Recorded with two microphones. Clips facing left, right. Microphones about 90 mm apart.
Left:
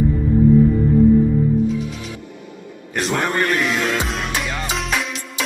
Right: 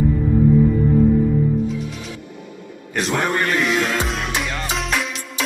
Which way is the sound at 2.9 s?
Centre (ahead or behind).